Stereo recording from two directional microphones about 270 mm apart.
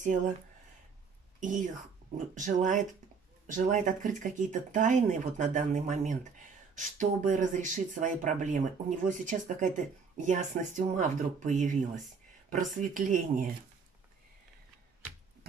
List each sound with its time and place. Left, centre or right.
1.4 s speech: right